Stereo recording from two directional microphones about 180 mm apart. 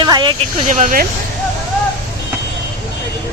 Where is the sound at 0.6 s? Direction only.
45° right (ahead or behind).